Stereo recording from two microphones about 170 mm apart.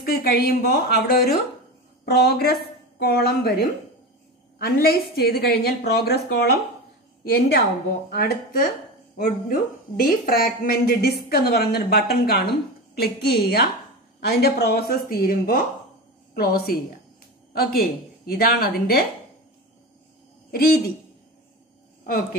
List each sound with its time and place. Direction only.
0.0 s a woman's voice: 70° left (ahead or behind)
20.5 s speech: 60° left (ahead or behind)